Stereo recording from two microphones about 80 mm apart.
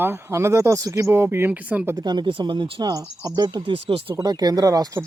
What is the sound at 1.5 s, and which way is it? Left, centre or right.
Speech, centre.